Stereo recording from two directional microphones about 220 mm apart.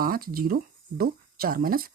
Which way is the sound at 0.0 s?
40° right (ahead or behind).